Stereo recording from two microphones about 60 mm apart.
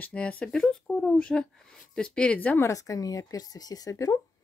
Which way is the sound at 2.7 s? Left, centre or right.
Left.